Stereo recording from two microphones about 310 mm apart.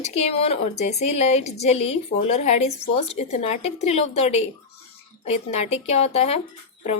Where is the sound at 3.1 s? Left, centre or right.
Left.